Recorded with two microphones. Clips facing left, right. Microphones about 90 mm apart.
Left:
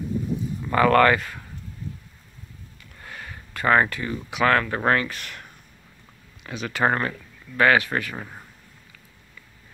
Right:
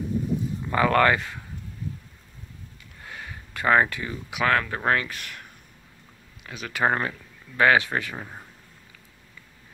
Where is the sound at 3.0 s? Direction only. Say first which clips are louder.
Even; 10° right (ahead or behind).